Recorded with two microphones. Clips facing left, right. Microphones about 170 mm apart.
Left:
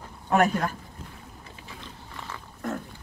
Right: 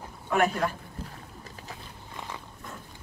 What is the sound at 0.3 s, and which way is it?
Speech, 40° left (ahead or behind).